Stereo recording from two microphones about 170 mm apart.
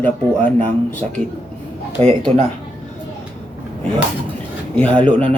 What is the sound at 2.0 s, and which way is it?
Speech, 35° right (ahead or behind).